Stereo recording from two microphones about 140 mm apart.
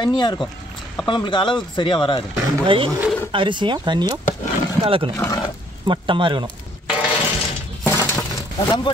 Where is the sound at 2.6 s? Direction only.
40° right (ahead or behind).